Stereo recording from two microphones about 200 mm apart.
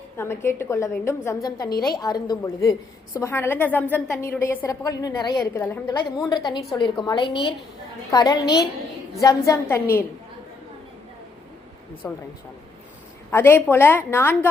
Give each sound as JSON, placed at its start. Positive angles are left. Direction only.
{"t": 0.2, "sound": "a woman's voice", "side_deg": 10}
{"t": 12.0, "sound": "a woman's voice", "side_deg": 5}
{"t": 13.3, "sound": "a woman's voice", "side_deg": 10}